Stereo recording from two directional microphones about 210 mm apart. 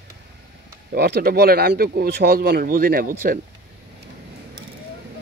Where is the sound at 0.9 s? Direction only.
50° right (ahead or behind).